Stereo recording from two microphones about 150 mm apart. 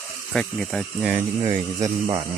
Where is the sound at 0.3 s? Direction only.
5° left (ahead or behind).